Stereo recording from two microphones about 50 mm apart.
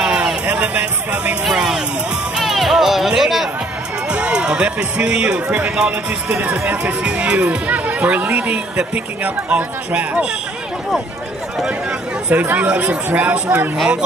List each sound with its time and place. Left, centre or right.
0.0 s music: centre
0.5 s speech: right
1.4 s speech: centre
2.3 s music: centre
4.1 s speech: centre
12.3 s speech: right
13.1 s speech: right